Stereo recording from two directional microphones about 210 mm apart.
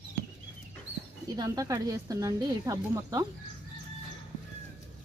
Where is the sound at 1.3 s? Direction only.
15° right (ahead or behind).